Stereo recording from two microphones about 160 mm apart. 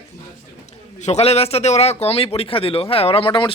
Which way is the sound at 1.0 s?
40° left (ahead or behind).